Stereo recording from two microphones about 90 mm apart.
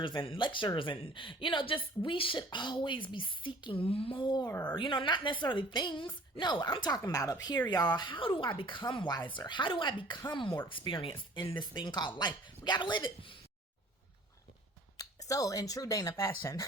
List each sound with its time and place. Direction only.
0.0 s speech: 70° left (ahead or behind)
4.4 s a woman's voice: 20° left (ahead or behind)
4.7 s speech: 60° left (ahead or behind)
7.0 s speech: 35° left (ahead or behind); by 13.3 s 65° left (ahead or behind)
14.9 s speech: 40° left (ahead or behind)